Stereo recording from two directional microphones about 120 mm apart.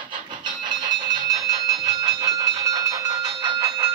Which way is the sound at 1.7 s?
30° right (ahead or behind).